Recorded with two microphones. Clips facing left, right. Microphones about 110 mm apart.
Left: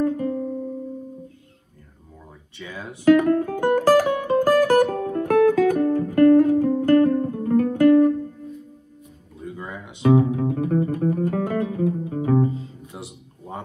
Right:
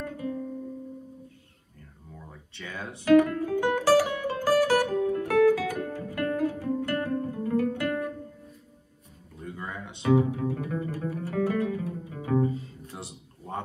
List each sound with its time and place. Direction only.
0.0 s music: 50° left (ahead or behind)
2.5 s speech: centre (ahead or behind)
3.2 s music: 50° left (ahead or behind)
9.4 s a sound: 15° left (ahead or behind)
10.3 s music: 50° left (ahead or behind)
11.6 s music: 35° left (ahead or behind)
12.9 s a sound: 15° left (ahead or behind)